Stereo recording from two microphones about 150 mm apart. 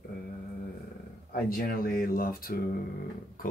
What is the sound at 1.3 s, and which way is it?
Speech, 75° left (ahead or behind).